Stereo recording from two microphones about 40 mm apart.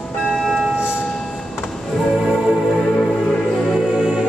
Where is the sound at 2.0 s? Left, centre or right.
Centre.